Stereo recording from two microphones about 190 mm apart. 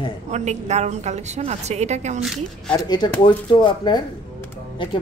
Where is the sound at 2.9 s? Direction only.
25° left (ahead or behind).